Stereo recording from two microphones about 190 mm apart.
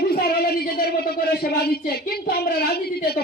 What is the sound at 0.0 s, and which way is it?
Speech, 55° left (ahead or behind).